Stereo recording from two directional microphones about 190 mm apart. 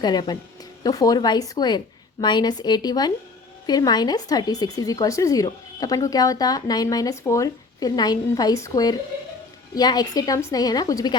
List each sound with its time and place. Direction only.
0.0 s speech: 20° left (ahead or behind)